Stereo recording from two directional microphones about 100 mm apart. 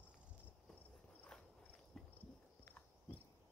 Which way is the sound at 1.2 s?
10° left (ahead or behind).